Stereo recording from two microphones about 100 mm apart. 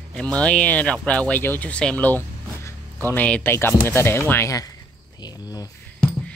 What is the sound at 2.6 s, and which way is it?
Music, 20° left (ahead or behind).